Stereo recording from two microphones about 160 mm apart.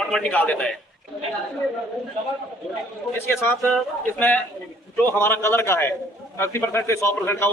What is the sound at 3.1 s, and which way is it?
A man's voice, 15° left (ahead or behind).